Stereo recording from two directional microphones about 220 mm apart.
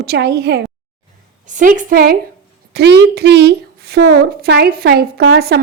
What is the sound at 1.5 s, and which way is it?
A woman's voice, 35° right (ahead or behind).